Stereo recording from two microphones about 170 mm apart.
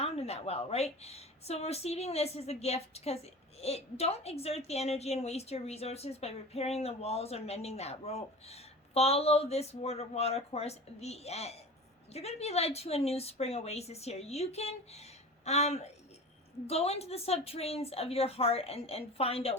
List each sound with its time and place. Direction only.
0.0 s a woman's voice: 35° left (ahead or behind)